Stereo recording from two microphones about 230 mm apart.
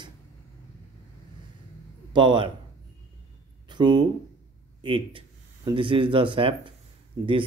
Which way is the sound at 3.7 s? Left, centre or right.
Centre.